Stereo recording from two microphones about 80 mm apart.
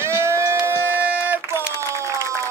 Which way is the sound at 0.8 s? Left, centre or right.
Right.